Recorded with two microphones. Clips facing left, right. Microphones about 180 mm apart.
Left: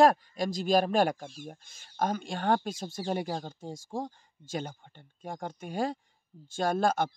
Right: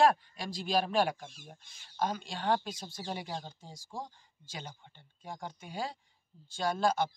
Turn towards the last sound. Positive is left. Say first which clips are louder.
# left 3 dB
turn(degrees=50)  # may be behind; listen again after turning